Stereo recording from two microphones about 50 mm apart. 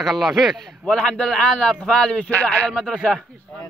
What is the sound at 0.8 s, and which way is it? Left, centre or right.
A man's voice, centre.